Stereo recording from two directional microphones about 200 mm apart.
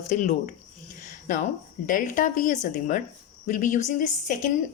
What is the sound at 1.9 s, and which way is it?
A woman's voice, 40° left (ahead or behind).